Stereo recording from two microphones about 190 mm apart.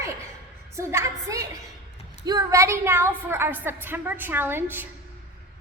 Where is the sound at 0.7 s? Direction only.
15° right (ahead or behind).